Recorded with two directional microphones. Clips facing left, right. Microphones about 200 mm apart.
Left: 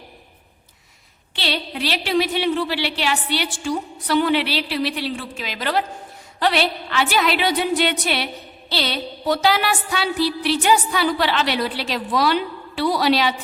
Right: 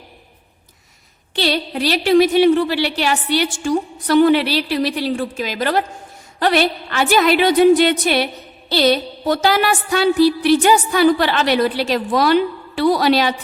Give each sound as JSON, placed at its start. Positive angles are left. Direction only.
{"t": 1.4, "sound": "music", "side_deg": -45}